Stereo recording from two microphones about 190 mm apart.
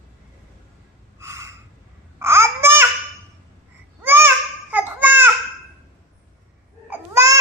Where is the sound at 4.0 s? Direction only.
10° right (ahead or behind).